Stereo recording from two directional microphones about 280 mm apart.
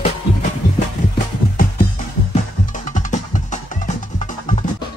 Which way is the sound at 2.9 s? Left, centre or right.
Left.